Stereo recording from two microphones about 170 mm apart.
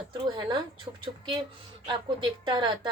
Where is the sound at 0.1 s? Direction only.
30° right (ahead or behind).